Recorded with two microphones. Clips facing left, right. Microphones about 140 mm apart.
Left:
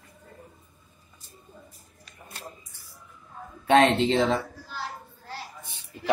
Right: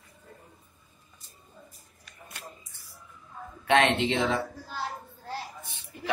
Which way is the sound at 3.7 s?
35° left (ahead or behind).